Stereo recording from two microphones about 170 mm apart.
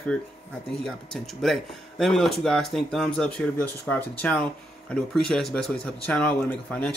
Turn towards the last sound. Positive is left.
turn(degrees=5)  # may be behind; listen again after turning